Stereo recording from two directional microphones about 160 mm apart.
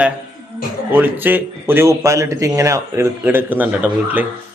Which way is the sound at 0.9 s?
10° right (ahead or behind).